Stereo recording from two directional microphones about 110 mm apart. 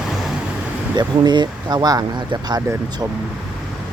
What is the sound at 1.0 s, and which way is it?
Speech, 45° right (ahead or behind).